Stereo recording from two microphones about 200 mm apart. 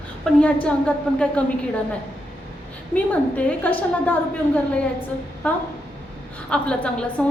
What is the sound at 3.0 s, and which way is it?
A woman's voice, 5° left (ahead or behind).